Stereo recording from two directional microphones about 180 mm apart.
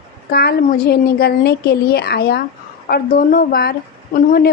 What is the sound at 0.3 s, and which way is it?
A woman's voice, 60° left (ahead or behind).